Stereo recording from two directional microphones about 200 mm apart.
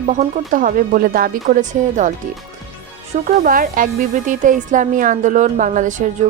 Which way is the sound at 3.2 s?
45° right (ahead or behind).